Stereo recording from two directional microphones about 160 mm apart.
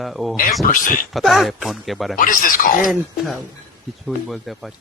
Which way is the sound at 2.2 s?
60° left (ahead or behind).